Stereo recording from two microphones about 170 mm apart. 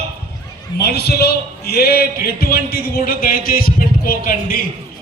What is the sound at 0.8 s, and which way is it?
A man's voice, 70° left (ahead or behind).